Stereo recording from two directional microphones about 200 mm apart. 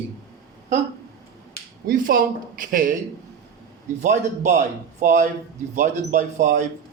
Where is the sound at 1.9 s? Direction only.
45° right (ahead or behind).